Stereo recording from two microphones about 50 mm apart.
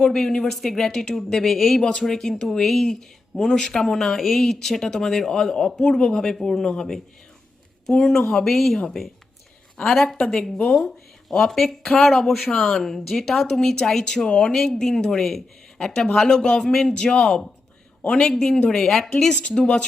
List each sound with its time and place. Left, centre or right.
0.0 s speech: centre
1.8 s speech: centre
18.0 s a man's voice: left
18.9 s speech: centre
19.2 s speech: centre